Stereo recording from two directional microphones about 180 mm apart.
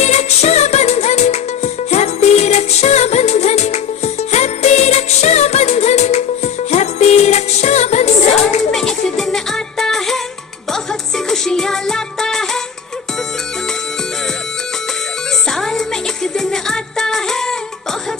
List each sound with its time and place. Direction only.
0.0 s music: 40° left (ahead or behind)
8.7 s music: 5° left (ahead or behind)
11.2 s music: 5° left (ahead or behind)
15.5 s music: centre (ahead or behind)